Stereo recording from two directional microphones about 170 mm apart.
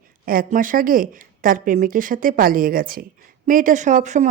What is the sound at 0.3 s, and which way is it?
A woman's voice, 55° right (ahead or behind).